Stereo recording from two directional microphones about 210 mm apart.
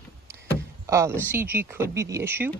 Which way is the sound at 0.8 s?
15° right (ahead or behind).